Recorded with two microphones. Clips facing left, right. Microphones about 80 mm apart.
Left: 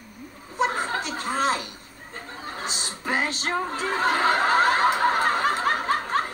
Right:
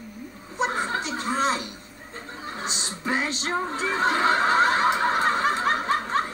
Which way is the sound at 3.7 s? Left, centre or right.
Left.